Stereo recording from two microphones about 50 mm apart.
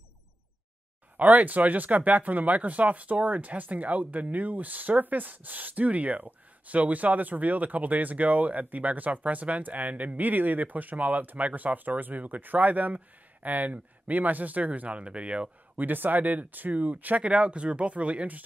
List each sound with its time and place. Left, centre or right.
1.1 s speech: right
15.8 s speech: right